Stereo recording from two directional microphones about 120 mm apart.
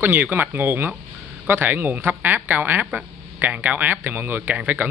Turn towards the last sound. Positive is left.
turn(degrees=-15)  # may be behind; listen again after turning